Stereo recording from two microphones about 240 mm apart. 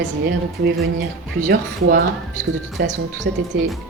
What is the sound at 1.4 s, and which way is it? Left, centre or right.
Speech, right.